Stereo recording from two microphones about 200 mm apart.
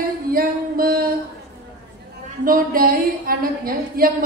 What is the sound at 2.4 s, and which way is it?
A woman's voice, 45° right (ahead or behind).